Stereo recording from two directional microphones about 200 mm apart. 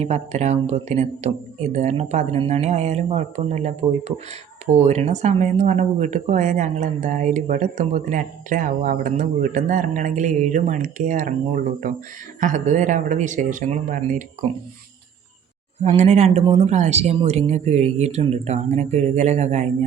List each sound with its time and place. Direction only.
0.0 s speech: 35° right (ahead or behind)
15.8 s speech: 35° right (ahead or behind)